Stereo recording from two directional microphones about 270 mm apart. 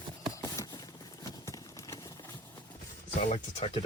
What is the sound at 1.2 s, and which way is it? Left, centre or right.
Clip-clop, centre.